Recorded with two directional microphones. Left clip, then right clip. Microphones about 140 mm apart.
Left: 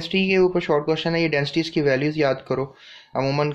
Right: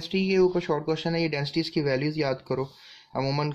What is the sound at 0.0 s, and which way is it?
Speech, 20° right (ahead or behind).